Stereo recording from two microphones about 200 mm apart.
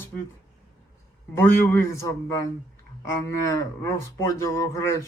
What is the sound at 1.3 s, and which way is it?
Speech, 10° left (ahead or behind).